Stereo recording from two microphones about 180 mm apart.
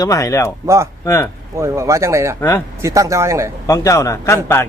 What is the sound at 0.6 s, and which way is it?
Speech, 15° right (ahead or behind).